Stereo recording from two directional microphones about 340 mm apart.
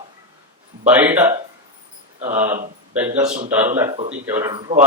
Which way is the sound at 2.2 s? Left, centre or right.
Centre.